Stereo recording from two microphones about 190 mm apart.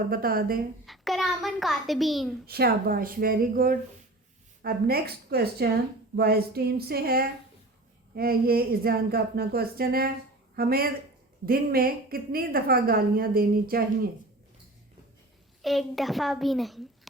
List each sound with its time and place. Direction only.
0.1 s a woman's voice: 50° right (ahead or behind)
0.9 s a sound: centre (ahead or behind)
2.5 s a woman's voice: 55° right (ahead or behind)
15.6 s a child's voice: centre (ahead or behind)